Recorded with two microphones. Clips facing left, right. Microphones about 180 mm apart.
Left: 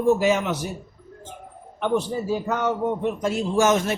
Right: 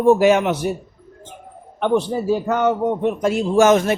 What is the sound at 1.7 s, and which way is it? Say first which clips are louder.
A man's voice: right 5 dB; 65° right (ahead or behind).